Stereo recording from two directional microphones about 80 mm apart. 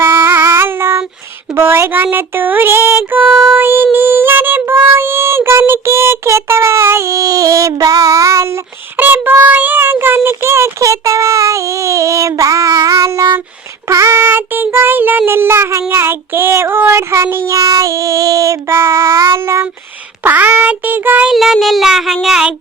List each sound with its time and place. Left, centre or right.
0.0 s female singing: right
1.5 s child singing: right
3.9 s a sound: right
9.0 s child singing: right
13.8 s child singing: right
20.2 s child singing: right
21.2 s child singing: centre